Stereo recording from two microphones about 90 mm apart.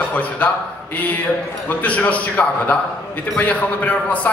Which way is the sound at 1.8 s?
15° left (ahead or behind).